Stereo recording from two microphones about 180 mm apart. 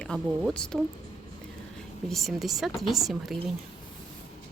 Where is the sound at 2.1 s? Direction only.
Centre (ahead or behind).